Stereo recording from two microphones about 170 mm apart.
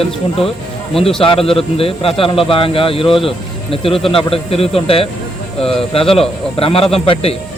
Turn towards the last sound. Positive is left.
turn(degrees=35)  # may be behind; listen again after turning